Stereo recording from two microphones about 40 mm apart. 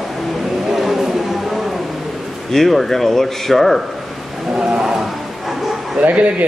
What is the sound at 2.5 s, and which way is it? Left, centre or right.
Speech, centre.